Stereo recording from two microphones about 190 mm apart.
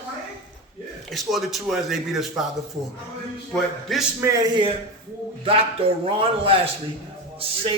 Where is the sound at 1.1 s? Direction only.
Centre (ahead or behind).